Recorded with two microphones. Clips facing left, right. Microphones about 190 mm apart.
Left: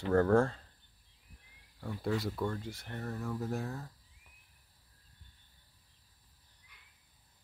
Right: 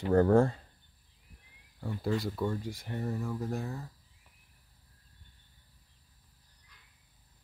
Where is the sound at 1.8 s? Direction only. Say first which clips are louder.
Right 2 dB; centre (ahead or behind).